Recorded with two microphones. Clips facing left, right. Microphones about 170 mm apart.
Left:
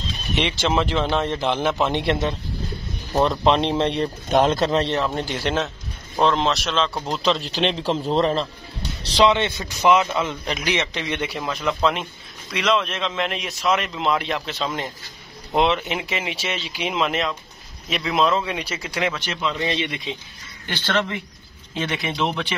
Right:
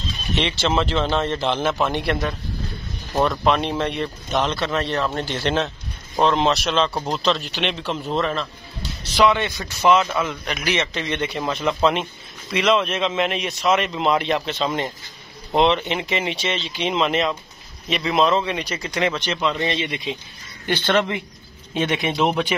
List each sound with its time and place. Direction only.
0.4 s a man's voice: 10° left (ahead or behind); by 4.1 s 30° left (ahead or behind)
4.3 s speech: 50° left (ahead or behind)
4.6 s a man's voice: 25° left (ahead or behind)
5.3 s a man's voice: 5° left (ahead or behind)
7.4 s a man's voice: 30° left (ahead or behind); by 11.3 s 10° left (ahead or behind)
11.3 s a man's voice: centre (ahead or behind)
20.6 s speech: 50° right (ahead or behind)
21.7 s speech: 20° right (ahead or behind)